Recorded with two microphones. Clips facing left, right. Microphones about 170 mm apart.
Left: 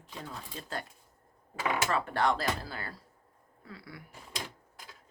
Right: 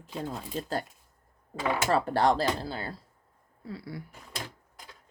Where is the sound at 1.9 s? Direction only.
35° right (ahead or behind).